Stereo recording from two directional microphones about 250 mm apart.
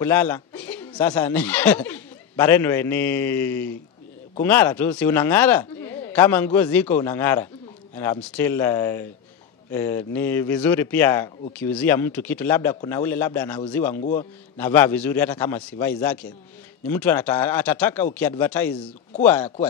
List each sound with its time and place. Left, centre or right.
0.0 s speech: centre
13.9 s a man's voice: left
14.6 s speech: centre